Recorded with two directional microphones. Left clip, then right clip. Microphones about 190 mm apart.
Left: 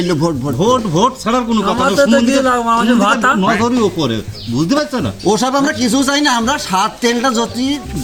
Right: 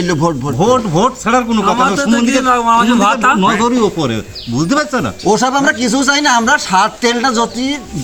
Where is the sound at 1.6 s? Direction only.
20° right (ahead or behind).